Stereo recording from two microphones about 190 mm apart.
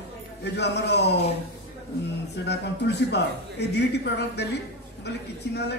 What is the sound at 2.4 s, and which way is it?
A man's voice, 60° left (ahead or behind).